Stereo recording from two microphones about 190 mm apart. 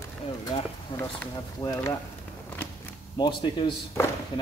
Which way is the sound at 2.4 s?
10° left (ahead or behind).